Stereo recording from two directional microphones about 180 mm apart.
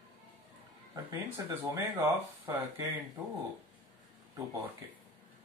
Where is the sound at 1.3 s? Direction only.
15° right (ahead or behind).